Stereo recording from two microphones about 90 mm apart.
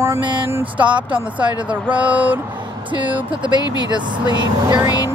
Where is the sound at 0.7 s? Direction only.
15° right (ahead or behind).